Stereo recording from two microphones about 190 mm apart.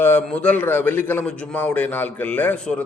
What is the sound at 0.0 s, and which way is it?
A man's voice, 10° left (ahead or behind).